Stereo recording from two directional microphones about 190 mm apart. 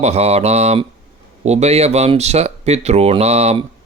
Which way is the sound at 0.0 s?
35° right (ahead or behind).